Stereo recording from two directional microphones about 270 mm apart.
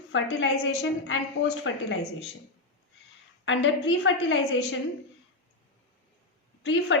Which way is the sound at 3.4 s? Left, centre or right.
Left.